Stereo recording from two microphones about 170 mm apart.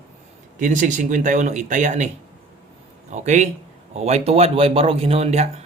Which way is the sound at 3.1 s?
45° right (ahead or behind).